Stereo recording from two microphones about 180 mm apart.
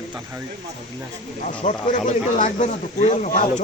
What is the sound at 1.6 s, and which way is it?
Speech, 45° left (ahead or behind).